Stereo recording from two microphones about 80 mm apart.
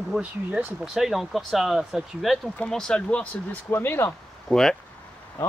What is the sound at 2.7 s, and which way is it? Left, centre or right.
Speech, centre.